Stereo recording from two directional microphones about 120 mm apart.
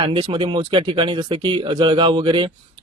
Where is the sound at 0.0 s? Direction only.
45° right (ahead or behind).